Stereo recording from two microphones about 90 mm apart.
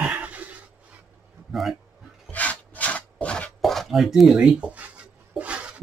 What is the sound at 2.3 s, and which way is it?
Rub, 15° left (ahead or behind).